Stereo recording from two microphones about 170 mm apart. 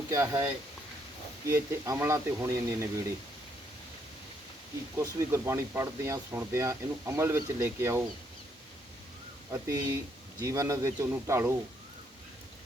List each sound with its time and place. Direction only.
0.1 s speech: 15° right (ahead or behind)
4.9 s speech: 15° right (ahead or behind)
9.5 s speech: 15° right (ahead or behind)